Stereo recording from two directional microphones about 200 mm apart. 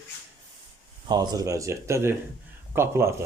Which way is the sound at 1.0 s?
20° right (ahead or behind).